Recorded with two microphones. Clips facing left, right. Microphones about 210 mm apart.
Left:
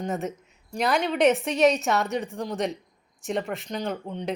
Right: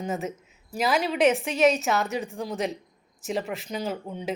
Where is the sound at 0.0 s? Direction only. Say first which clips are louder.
Left 1 dB; centre (ahead or behind).